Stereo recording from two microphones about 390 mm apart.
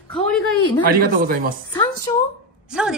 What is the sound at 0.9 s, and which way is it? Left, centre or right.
Speech, right.